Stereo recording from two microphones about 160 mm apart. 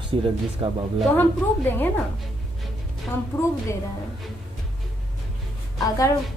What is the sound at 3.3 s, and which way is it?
Speech, 15° left (ahead or behind).